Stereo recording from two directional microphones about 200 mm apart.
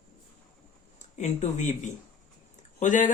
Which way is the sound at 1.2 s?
35° left (ahead or behind).